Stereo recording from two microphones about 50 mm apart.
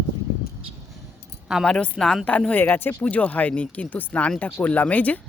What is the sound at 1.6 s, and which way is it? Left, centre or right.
Speech, centre.